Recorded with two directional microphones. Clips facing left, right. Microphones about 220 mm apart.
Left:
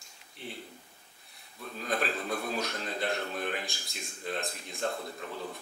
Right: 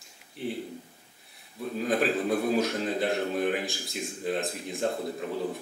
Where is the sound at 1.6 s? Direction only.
10° right (ahead or behind).